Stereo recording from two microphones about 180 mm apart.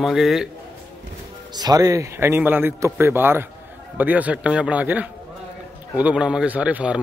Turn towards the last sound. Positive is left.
turn(degrees=-5)  # may be behind; listen again after turning